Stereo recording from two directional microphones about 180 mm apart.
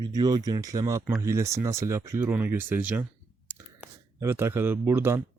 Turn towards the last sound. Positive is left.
turn(degrees=-15)  # may be behind; listen again after turning